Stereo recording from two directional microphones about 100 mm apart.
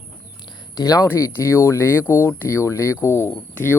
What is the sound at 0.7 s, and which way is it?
Speech, 35° left (ahead or behind).